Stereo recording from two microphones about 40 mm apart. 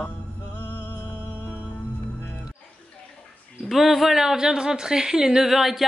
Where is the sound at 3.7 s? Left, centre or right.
Centre.